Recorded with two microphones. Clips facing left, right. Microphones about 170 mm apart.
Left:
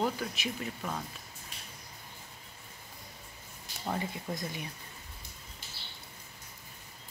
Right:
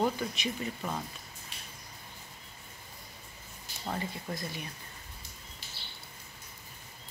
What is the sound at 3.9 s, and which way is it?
Speech, 15° left (ahead or behind).